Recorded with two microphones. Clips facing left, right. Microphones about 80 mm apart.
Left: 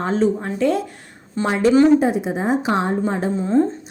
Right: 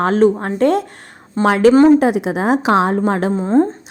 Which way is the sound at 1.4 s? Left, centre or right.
Right.